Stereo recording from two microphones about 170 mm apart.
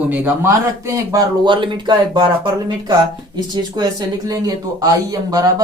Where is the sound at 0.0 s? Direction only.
10° right (ahead or behind).